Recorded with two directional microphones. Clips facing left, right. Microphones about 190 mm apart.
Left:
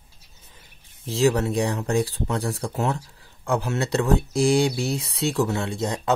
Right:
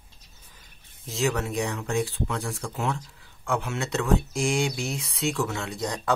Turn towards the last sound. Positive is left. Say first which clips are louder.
# left 5 dB
turn(degrees=25)  # may be behind; listen again after turning